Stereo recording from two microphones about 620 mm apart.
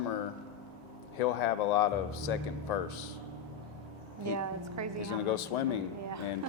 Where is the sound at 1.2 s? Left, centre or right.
Left.